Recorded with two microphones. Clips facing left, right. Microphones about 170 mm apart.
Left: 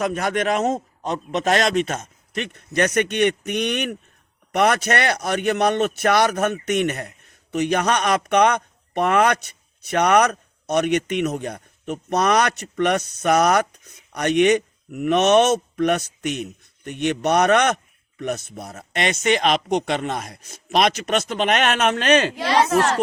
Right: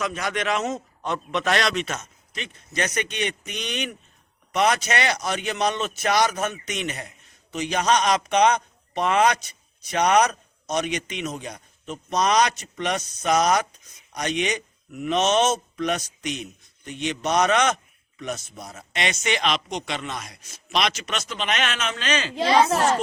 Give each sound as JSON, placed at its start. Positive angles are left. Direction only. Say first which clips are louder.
{"t": 0.0, "sound": "a man's voice", "louder": "left 5 dB", "side_deg": 50}